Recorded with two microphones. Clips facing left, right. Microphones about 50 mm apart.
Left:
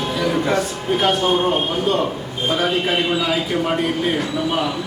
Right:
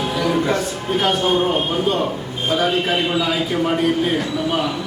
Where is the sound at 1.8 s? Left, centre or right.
Centre.